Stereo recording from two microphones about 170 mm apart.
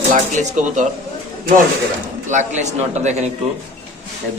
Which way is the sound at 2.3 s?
45° right (ahead or behind).